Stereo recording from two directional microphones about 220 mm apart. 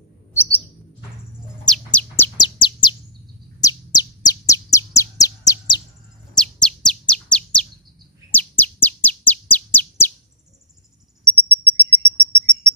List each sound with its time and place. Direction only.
1.7 s bird: 5° left (ahead or behind)
2.3 s bird: 20° left (ahead or behind)
6.3 s chirp: 5° left (ahead or behind)
8.3 s bird: 10° left (ahead or behind)
11.3 s a sound: 10° left (ahead or behind)